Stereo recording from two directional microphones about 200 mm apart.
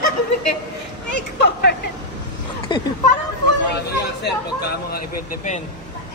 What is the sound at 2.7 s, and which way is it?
Speech, 25° left (ahead or behind).